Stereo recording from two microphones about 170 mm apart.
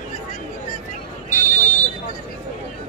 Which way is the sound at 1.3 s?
45° left (ahead or behind).